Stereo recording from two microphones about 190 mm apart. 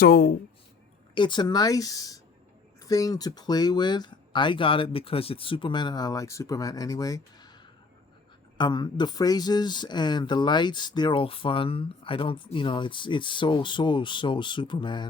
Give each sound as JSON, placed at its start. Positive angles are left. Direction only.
{"t": 0.0, "sound": "speech", "side_deg": 55}
{"t": 1.1, "sound": "speech", "side_deg": 25}
{"t": 8.5, "sound": "speech", "side_deg": 25}